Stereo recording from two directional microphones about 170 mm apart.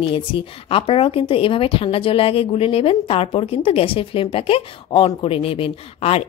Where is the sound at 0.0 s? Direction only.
30° left (ahead or behind).